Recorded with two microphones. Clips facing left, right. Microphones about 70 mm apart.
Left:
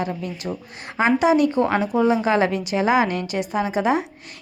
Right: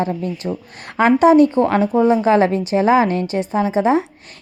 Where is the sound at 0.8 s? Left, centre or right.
Right.